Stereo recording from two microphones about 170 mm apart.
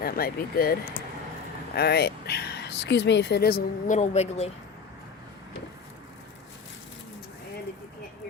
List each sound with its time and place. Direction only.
0.0 s speech: 60° left (ahead or behind)
3.9 s speech: 40° left (ahead or behind)